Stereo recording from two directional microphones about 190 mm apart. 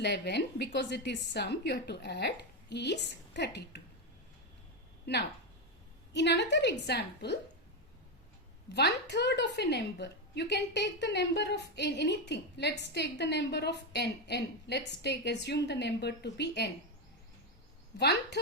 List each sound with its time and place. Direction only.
0.0 s a woman's voice: 60° left (ahead or behind)
5.1 s a woman's voice: 60° left (ahead or behind)
8.7 s a woman's voice: 60° left (ahead or behind)
17.9 s a woman's voice: 60° left (ahead or behind)